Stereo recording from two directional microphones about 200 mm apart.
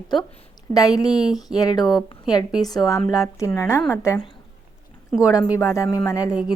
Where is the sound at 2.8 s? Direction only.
15° left (ahead or behind).